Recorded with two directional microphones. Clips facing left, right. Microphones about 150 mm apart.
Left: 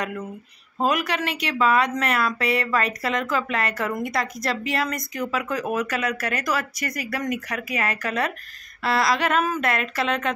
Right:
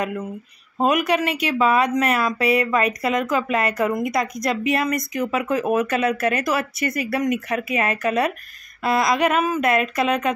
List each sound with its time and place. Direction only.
0.7 s speech: 20° right (ahead or behind)